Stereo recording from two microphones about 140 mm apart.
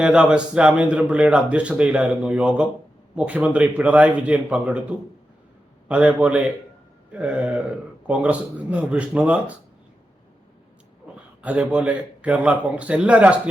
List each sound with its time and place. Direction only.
0.0 s a man's voice: 5° right (ahead or behind)
11.4 s a man's voice: 10° right (ahead or behind)